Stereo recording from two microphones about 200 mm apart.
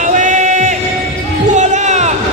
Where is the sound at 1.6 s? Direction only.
35° right (ahead or behind).